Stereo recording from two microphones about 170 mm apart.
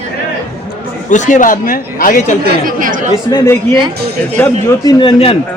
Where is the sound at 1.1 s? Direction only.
45° left (ahead or behind).